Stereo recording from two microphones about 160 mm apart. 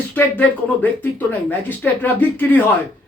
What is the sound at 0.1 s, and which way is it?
A man's voice, 10° left (ahead or behind).